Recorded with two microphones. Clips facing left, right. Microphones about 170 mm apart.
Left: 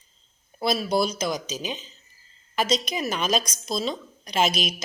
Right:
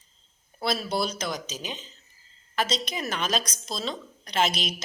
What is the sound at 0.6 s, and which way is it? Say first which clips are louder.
Speech: left 4 dB; 10° left (ahead or behind).